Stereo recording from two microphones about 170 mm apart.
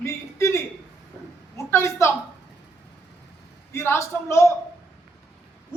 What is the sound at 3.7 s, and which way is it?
Speech, 15° left (ahead or behind).